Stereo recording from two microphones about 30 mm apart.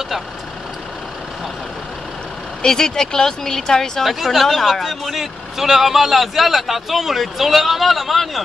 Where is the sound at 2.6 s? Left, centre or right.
Left.